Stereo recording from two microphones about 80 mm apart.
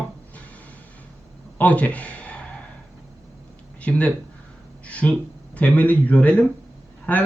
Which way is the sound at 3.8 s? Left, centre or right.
Centre.